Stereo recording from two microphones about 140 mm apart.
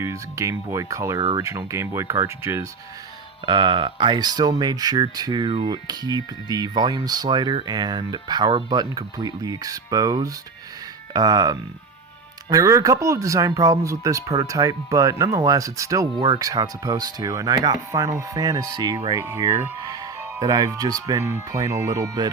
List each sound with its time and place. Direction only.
0.0 s speech: 20° right (ahead or behind)
3.4 s speech: 35° right (ahead or behind)